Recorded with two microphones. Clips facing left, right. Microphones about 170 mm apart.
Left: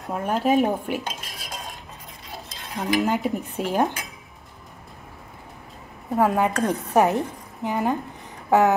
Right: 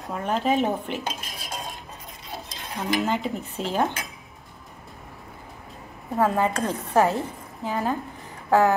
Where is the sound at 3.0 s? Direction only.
10° left (ahead or behind).